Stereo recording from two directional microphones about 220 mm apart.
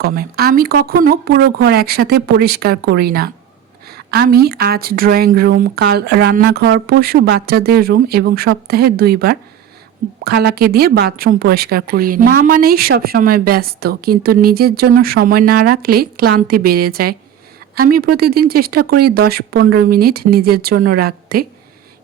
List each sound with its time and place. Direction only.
0.0 s a woman's voice: 45° right (ahead or behind)